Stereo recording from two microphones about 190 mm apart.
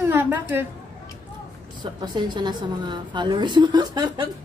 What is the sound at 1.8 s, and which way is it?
A woman's voice, 25° right (ahead or behind).